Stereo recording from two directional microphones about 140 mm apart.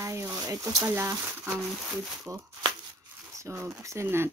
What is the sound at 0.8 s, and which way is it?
Speech, 20° right (ahead or behind).